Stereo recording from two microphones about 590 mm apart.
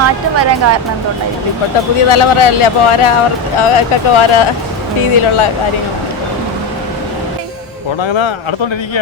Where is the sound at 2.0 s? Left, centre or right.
Left.